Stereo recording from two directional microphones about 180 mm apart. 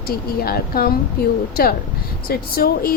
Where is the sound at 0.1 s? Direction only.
55° left (ahead or behind).